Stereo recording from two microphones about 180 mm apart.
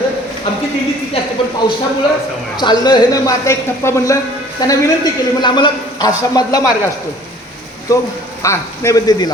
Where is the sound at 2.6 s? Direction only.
25° left (ahead or behind).